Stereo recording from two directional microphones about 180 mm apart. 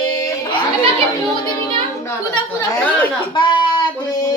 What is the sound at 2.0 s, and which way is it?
A man's voice, 15° left (ahead or behind).